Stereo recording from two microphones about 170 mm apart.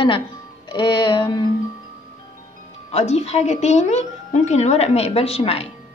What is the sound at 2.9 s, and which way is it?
A woman's voice, 40° left (ahead or behind).